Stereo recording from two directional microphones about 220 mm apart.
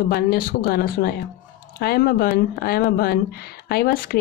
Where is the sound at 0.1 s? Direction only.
40° left (ahead or behind).